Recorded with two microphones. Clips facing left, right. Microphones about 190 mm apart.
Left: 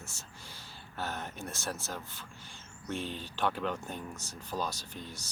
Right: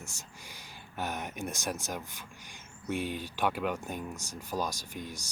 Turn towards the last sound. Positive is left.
turn(degrees=-10)  # may be behind; listen again after turning